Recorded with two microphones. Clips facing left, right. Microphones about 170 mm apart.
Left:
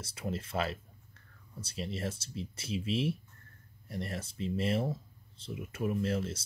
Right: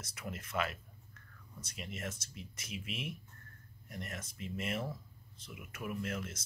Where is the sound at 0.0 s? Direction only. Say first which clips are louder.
Left 7 dB; 30° left (ahead or behind).